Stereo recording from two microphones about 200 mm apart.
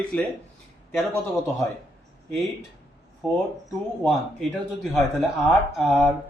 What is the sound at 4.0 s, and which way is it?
Speech, centre (ahead or behind).